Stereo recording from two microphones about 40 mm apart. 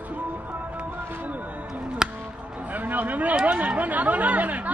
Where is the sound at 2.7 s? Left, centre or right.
Right.